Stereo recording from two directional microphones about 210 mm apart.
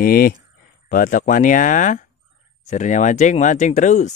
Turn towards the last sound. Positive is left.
turn(degrees=35)  # may be behind; listen again after turning